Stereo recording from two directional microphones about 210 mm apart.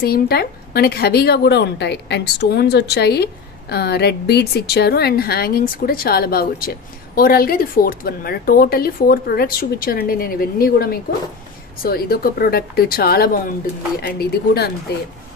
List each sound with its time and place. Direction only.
0.0 s a woman's voice: 45° left (ahead or behind)